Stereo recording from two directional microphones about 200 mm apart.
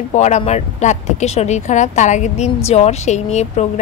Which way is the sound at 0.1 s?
35° left (ahead or behind).